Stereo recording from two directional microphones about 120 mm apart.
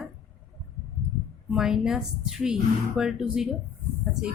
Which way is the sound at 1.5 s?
5° right (ahead or behind).